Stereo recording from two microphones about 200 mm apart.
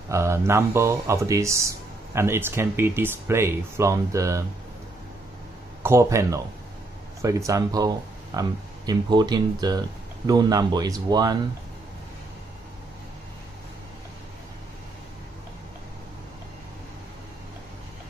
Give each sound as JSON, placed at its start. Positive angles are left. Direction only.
{"t": 0.1, "sound": "speech", "side_deg": -15}
{"t": 5.8, "sound": "speech", "side_deg": -15}